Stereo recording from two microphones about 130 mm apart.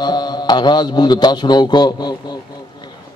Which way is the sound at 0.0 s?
35° left (ahead or behind).